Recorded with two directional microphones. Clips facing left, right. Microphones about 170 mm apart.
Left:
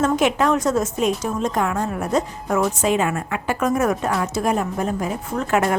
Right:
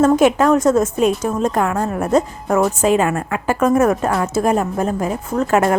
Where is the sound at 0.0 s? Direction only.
45° right (ahead or behind).